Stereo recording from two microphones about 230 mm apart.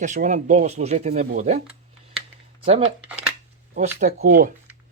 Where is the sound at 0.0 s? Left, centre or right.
Right.